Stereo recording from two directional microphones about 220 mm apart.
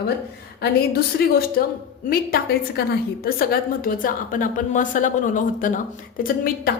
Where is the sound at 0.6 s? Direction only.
45° left (ahead or behind).